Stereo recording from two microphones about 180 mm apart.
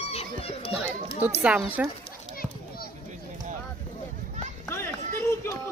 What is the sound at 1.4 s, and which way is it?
Speech, 5° right (ahead or behind).